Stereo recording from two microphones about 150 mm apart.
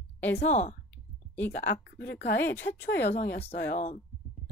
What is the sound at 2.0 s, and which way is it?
Speech, 90° left.